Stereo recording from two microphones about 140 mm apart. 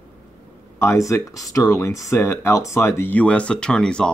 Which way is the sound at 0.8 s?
20° left (ahead or behind).